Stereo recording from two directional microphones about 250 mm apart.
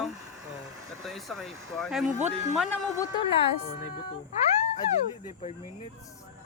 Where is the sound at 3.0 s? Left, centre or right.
Left.